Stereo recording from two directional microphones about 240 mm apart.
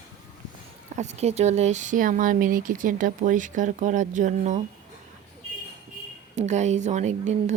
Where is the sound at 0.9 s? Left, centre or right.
Right.